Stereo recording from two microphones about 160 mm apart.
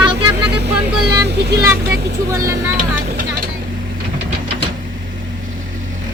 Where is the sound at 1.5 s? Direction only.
15° right (ahead or behind).